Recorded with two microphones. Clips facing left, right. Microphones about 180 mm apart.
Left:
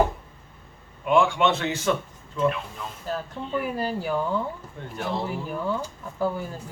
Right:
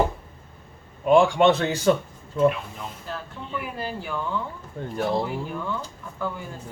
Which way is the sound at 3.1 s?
40° left (ahead or behind).